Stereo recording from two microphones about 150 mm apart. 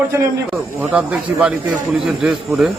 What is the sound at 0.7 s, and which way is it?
A man's voice, 10° right (ahead or behind).